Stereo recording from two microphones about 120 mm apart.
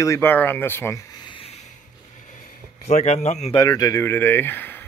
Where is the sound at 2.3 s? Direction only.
70° left (ahead or behind).